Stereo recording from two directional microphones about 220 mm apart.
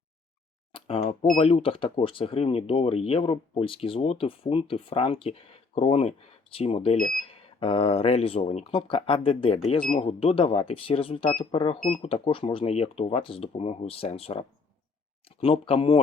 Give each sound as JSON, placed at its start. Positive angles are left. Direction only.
{"t": 0.7, "sound": "speech", "side_deg": 30}